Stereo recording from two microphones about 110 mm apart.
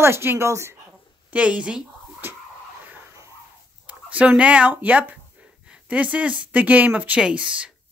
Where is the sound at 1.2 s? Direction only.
10° right (ahead or behind).